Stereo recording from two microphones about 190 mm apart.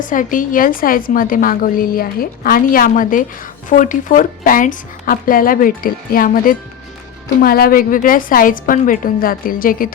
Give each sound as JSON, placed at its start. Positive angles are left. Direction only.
{"t": 0.0, "sound": "a woman's voice", "side_deg": 45}